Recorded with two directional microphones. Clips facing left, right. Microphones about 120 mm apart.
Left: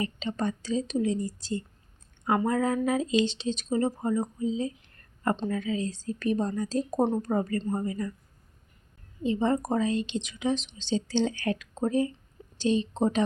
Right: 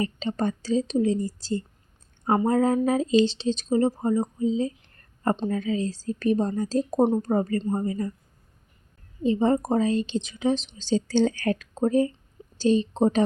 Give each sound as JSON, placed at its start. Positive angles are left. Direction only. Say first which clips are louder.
{"t": 0.0, "sound": "speech", "louder": "right 4 dB", "side_deg": -35}
{"t": 9.2, "sound": "speech", "louder": "right 4 dB", "side_deg": -35}